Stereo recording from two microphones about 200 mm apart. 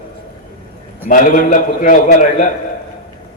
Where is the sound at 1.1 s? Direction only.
40° left (ahead or behind).